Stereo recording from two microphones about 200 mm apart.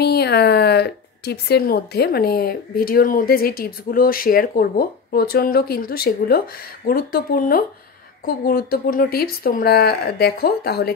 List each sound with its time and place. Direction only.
0.0 s a woman's voice: 55° left (ahead or behind)